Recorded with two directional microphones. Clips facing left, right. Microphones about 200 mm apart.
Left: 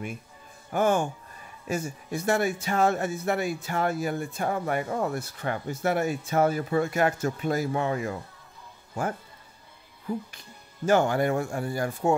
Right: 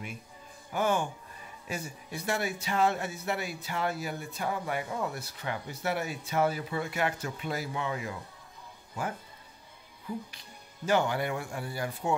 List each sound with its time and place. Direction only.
0.7 s speech: 50° left (ahead or behind)
10.9 s speech: 45° left (ahead or behind)